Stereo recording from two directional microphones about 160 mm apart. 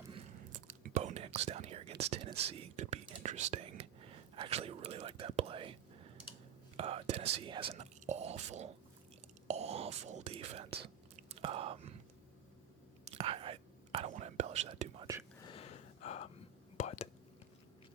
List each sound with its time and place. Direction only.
0.5 s whispering: 55° right (ahead or behind); by 5.7 s 35° right (ahead or behind)
6.7 s whispering: 40° right (ahead or behind)
13.1 s whispering: 35° right (ahead or behind)
14.1 s whispering: 45° right (ahead or behind)
15.0 s whispering: 20° right (ahead or behind)
15.4 s gasp: 40° left (ahead or behind)
16.7 s whispering: 45° left (ahead or behind)